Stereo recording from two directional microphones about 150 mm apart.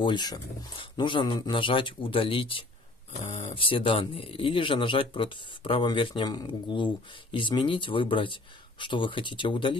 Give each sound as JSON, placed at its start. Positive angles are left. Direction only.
{"t": 0.0, "sound": "speech", "side_deg": 30}